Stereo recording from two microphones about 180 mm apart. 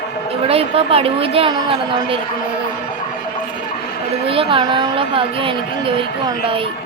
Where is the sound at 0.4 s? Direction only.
35° right (ahead or behind).